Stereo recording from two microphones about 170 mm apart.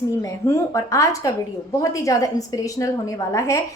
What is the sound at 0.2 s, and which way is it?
A woman's voice, 20° left (ahead or behind).